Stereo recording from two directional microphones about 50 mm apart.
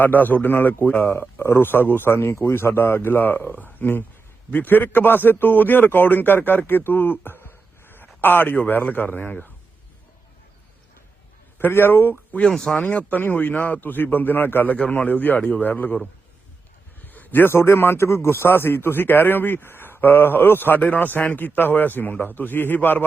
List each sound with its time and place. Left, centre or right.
0.0 s a man's voice: left
1.4 s a man's voice: left
6.7 s a sound: left
8.5 s a man's voice: left
11.5 s a man's voice: left
12.5 s speech: centre
12.8 s a man's voice: left
17.1 s a man's voice: left